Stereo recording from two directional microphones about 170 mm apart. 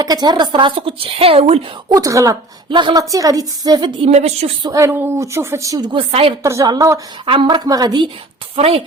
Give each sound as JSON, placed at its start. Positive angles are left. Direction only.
{"t": 0.0, "sound": "a woman's voice", "side_deg": -25}
{"t": 1.9, "sound": "a woman's voice", "side_deg": -20}
{"t": 4.1, "sound": "a woman's voice", "side_deg": -40}
{"t": 4.6, "sound": "a woman's voice", "side_deg": -20}
{"t": 6.4, "sound": "a woman's voice", "side_deg": -20}
{"t": 7.3, "sound": "a woman's voice", "side_deg": -30}